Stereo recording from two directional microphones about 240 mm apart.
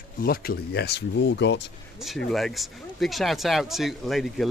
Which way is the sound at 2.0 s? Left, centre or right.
Centre.